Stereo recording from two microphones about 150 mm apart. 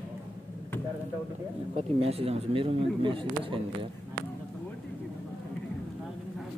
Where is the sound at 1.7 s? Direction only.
40° right (ahead or behind).